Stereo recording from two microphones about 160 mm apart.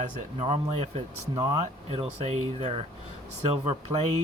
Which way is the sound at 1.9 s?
40° right (ahead or behind).